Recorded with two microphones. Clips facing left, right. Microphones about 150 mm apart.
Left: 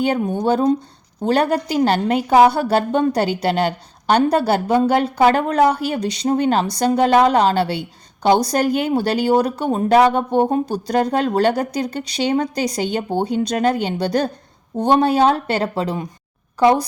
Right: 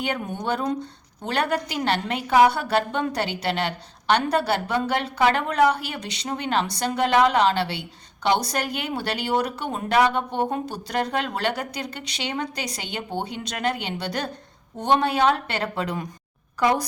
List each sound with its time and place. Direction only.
0.0 s a woman's voice: 35° left (ahead or behind)